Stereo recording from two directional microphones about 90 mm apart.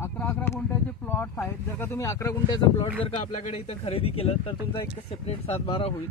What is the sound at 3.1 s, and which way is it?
Speech, 90° left.